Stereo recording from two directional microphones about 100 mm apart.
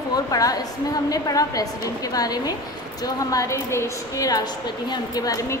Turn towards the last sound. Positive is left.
turn(degrees=35)  # may be behind; listen again after turning